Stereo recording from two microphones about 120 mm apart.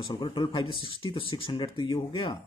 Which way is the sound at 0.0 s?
45° left (ahead or behind).